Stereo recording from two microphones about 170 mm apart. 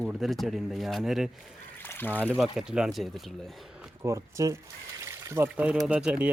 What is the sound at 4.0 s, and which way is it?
Speech, 20° right (ahead or behind).